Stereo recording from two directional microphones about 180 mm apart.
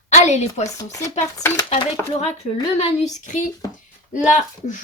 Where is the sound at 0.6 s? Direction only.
20° left (ahead or behind).